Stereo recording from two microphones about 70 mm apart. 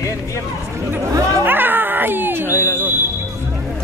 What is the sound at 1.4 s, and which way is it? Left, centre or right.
Cat, right.